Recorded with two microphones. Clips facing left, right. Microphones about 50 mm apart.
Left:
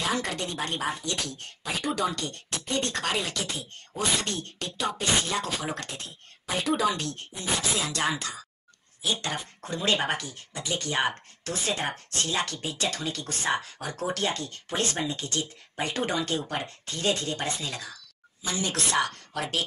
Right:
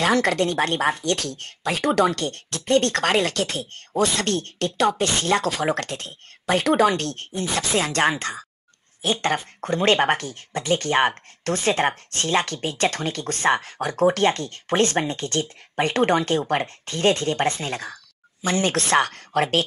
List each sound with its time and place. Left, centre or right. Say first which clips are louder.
0.0 s speech: right 10 dB; right
18.4 s speech: right 8 dB; right